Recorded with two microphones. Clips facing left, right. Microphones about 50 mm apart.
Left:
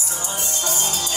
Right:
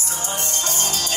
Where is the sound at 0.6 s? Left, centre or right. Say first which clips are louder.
Left 2 dB; right.